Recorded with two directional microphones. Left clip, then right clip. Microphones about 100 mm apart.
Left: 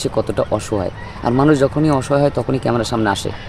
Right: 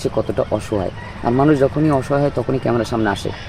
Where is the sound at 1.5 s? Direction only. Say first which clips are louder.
Left 1 dB; 20° left (ahead or behind).